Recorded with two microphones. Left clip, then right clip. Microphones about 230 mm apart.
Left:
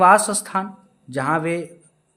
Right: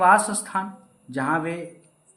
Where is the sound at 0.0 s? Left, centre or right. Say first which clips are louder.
Left 4 dB; left.